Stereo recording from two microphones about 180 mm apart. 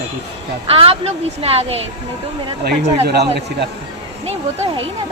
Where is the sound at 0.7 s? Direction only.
30° right (ahead or behind).